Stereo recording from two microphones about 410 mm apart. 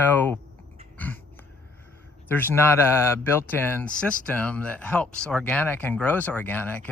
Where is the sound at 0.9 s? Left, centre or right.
Centre.